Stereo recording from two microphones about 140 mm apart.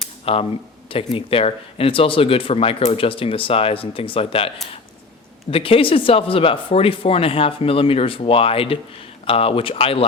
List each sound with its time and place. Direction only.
0.3 s speech: 40° left (ahead or behind)